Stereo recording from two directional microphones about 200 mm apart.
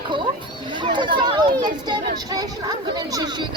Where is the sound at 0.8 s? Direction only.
25° right (ahead or behind).